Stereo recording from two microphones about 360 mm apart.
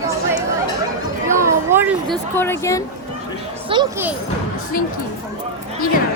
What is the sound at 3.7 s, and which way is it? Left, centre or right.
Speech, centre.